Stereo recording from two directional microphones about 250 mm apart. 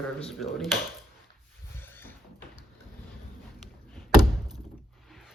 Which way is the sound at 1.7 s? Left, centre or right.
Centre.